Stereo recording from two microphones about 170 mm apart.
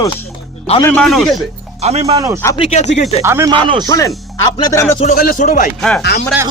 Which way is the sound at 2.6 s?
40° left (ahead or behind).